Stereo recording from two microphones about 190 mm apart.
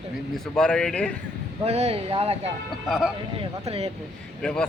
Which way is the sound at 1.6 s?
35° right (ahead or behind).